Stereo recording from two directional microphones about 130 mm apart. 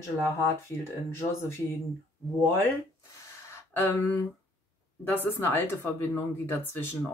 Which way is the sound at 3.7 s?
15° left (ahead or behind).